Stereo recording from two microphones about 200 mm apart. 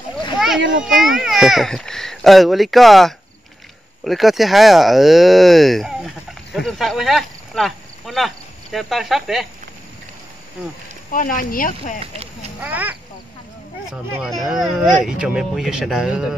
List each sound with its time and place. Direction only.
0.8 s speech: centre (ahead or behind)
11.1 s speech: 40° left (ahead or behind)
12.0 s speech: 30° right (ahead or behind)
12.6 s speech: 10° right (ahead or behind)